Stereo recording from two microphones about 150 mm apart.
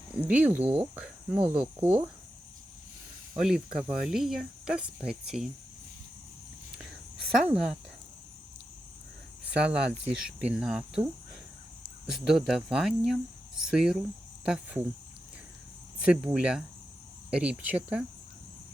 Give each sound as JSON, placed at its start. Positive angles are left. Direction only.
{"t": 0.2, "sound": "speech", "side_deg": -10}
{"t": 0.6, "sound": "speech", "side_deg": -40}
{"t": 0.9, "sound": "speech", "side_deg": -10}
{"t": 3.3, "sound": "speech", "side_deg": -5}
{"t": 7.4, "sound": "speech", "side_deg": -5}
{"t": 9.5, "sound": "speech", "side_deg": -5}
{"t": 12.0, "sound": "speech", "side_deg": -5}
{"t": 16.0, "sound": "speech", "side_deg": -5}